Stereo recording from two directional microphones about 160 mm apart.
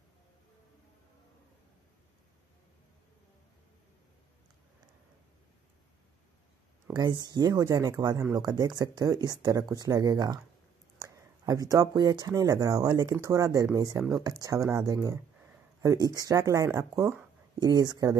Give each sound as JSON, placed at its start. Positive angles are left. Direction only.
{"t": 7.0, "sound": "speech", "side_deg": -25}